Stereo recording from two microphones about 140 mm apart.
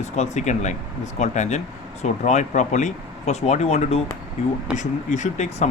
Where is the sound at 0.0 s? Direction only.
55° left (ahead or behind).